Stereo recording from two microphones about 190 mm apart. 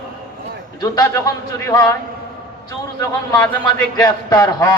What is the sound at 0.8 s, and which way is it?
A man's voice, 20° left (ahead or behind).